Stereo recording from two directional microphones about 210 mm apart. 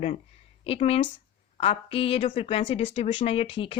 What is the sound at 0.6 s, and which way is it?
A woman's voice, 25° left (ahead or behind).